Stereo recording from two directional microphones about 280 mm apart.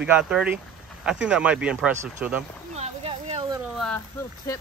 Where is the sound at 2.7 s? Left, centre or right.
Right.